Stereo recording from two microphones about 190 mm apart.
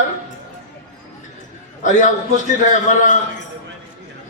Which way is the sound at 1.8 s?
40° left (ahead or behind).